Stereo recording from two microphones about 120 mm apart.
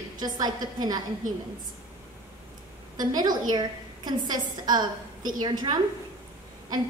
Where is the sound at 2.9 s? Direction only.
35° right (ahead or behind).